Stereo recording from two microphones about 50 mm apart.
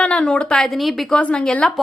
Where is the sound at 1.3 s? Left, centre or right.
Left.